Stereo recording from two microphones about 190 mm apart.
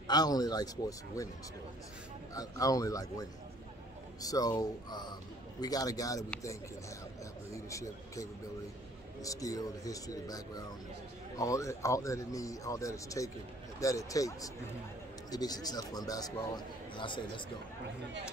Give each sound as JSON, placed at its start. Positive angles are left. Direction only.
{"t": 0.1, "sound": "speech", "side_deg": 20}
{"t": 2.3, "sound": "speech", "side_deg": 20}